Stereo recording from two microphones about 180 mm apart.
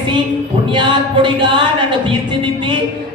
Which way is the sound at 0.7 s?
25° right (ahead or behind).